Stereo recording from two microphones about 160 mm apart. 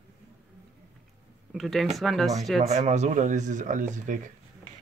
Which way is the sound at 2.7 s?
45° right (ahead or behind).